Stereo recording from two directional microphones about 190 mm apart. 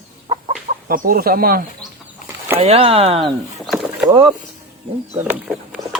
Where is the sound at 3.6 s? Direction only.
Centre (ahead or behind).